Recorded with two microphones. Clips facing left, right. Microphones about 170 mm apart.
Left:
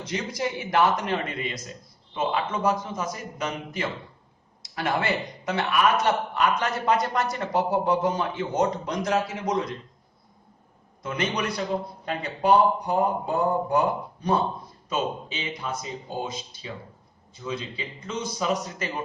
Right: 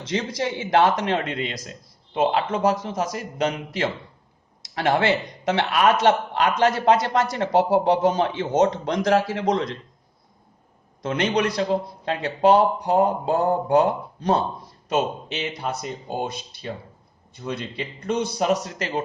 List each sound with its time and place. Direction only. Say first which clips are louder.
0.1 s a man's voice: right 4 dB; 85° right
11.0 s a man's voice: right 6 dB; 75° right (ahead or behind)